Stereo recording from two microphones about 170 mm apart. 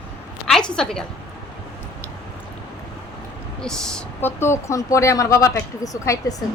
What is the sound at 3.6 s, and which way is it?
Speech, 5° left (ahead or behind).